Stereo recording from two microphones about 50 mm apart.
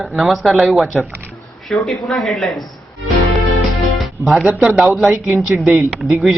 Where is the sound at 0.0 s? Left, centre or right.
Centre.